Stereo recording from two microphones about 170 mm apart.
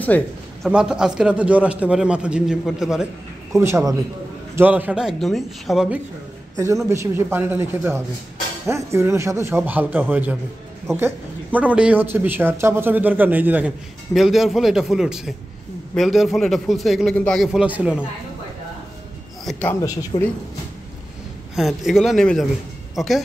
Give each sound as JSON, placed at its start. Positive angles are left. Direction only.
{"t": 0.0, "sound": "a sound", "side_deg": 10}
{"t": 0.7, "sound": "speech", "side_deg": -5}
{"t": 3.5, "sound": "speech", "side_deg": -15}
{"t": 6.5, "sound": "speech", "side_deg": -20}
{"t": 19.7, "sound": "speech", "side_deg": 20}
{"t": 21.5, "sound": "a woman's voice", "side_deg": 0}